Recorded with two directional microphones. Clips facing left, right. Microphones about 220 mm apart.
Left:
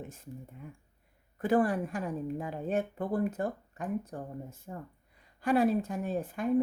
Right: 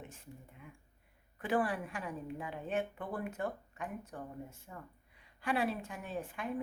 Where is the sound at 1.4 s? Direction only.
40° left (ahead or behind).